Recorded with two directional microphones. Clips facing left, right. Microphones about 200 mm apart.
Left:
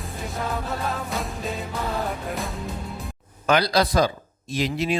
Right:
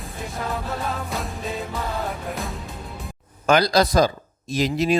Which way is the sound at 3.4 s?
45° right (ahead or behind).